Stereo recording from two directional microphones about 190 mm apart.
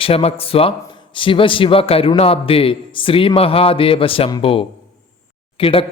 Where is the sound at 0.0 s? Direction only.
30° left (ahead or behind).